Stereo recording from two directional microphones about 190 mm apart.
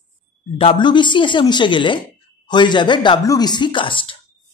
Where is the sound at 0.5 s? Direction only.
25° left (ahead or behind).